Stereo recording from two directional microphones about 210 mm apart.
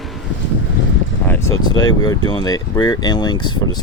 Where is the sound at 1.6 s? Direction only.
20° left (ahead or behind).